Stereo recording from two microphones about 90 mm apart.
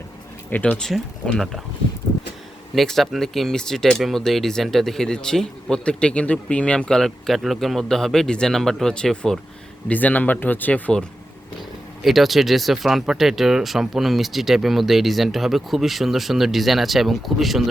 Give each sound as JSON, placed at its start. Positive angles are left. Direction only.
{"t": 0.5, "sound": "speech", "side_deg": 15}
{"t": 0.8, "sound": "speech", "side_deg": 5}
{"t": 2.7, "sound": "speech", "side_deg": 0}
{"t": 9.9, "sound": "speech", "side_deg": 20}
{"t": 12.0, "sound": "speech", "side_deg": 0}